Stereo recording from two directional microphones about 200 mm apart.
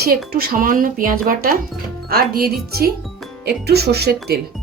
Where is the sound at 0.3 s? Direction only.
45° right (ahead or behind).